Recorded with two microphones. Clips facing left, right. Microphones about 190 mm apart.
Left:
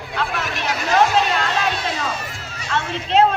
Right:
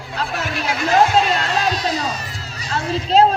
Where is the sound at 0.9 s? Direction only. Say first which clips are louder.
Right 2 dB; 35° right (ahead or behind).